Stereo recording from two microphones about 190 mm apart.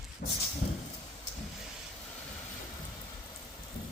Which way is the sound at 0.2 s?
55° left (ahead or behind).